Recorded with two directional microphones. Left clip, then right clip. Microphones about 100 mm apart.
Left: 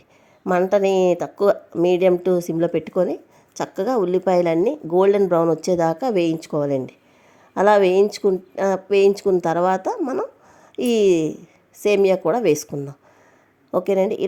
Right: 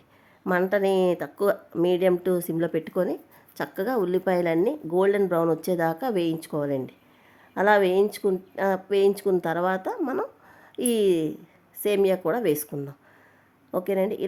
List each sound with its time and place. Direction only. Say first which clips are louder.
0.4 s a woman's voice: left 5 dB; 15° left (ahead or behind)
0.7 s a woman's voice: left 6 dB; 30° left (ahead or behind)
13.7 s speech: left 6 dB; 40° left (ahead or behind)